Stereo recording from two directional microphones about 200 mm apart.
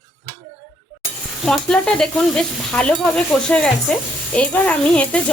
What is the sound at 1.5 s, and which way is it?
Stir, 5° left (ahead or behind).